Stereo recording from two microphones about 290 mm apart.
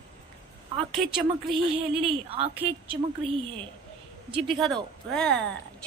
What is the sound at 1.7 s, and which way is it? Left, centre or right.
Speech, centre.